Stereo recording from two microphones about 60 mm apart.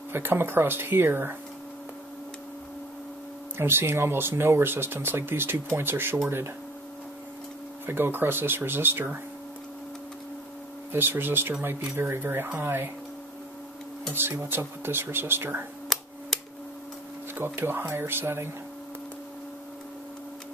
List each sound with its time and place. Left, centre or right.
0.1 s speech: right
3.5 s speech: right
7.8 s speech: right
10.9 s speech: right
14.1 s speech: right
15.9 s a sound: centre
17.4 s speech: right